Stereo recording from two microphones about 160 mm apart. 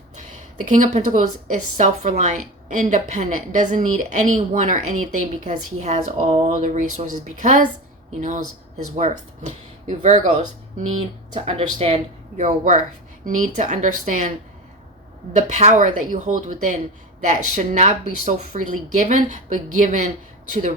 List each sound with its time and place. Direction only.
0.2 s a woman's voice: 50° right (ahead or behind)
9.0 s a woman's voice: 50° right (ahead or behind)
12.4 s a woman's voice: 55° right (ahead or behind)
15.4 s a woman's voice: 50° right (ahead or behind)